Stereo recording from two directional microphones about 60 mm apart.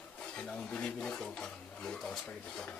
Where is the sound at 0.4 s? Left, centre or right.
Centre.